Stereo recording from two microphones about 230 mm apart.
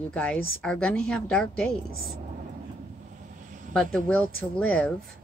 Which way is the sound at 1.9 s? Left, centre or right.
Right.